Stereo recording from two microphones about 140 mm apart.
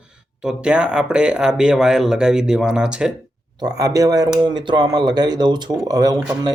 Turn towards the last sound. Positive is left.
turn(degrees=-25)  # may be behind; listen again after turning